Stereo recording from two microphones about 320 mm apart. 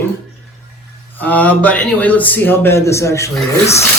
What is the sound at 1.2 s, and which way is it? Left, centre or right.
Speech, centre.